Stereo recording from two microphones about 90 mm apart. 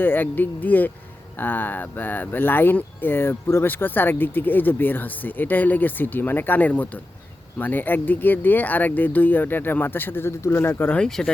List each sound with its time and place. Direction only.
0.0 s speech: 20° left (ahead or behind)
10.9 s speech: 10° left (ahead or behind)